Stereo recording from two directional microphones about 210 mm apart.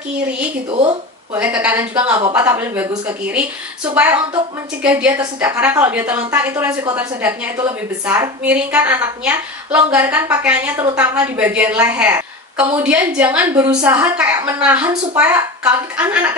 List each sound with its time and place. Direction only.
0.7 s speech: 25° right (ahead or behind)
1.4 s a woman's voice: 5° right (ahead or behind)
2.0 s speech: 25° right (ahead or behind)
2.3 s a woman's voice: 10° right (ahead or behind)